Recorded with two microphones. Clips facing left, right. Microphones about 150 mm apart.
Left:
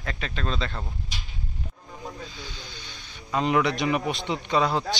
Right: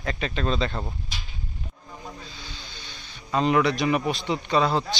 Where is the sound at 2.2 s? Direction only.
20° left (ahead or behind).